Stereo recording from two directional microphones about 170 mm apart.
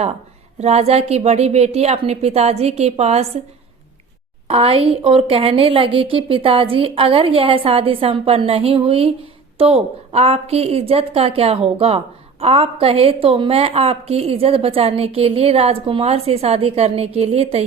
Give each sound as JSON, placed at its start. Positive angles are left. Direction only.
{"t": 0.6, "sound": "a woman's voice", "side_deg": -40}
{"t": 4.4, "sound": "a woman's voice", "side_deg": -35}